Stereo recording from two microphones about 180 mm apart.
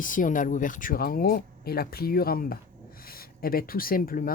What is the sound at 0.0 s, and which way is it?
Speech, 50° left (ahead or behind).